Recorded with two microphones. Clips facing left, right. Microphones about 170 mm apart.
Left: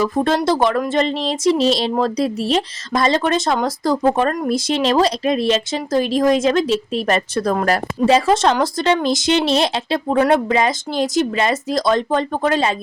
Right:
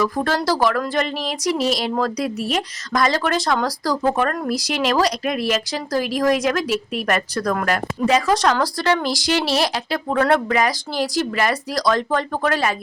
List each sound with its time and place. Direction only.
0.0 s speech: 25° left (ahead or behind)